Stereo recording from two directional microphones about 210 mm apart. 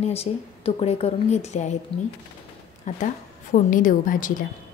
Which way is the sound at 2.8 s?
35° left (ahead or behind).